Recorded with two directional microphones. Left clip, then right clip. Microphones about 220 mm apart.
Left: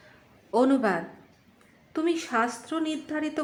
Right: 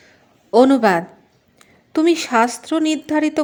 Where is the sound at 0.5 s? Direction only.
30° right (ahead or behind).